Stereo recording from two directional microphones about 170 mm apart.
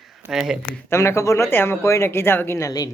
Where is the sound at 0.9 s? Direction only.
15° left (ahead or behind).